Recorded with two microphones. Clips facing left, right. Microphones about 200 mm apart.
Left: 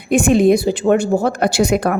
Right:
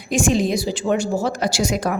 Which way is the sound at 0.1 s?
60° left (ahead or behind).